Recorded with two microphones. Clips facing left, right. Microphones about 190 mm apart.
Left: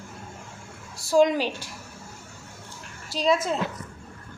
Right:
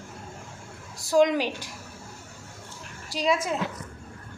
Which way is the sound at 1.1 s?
15° right (ahead or behind).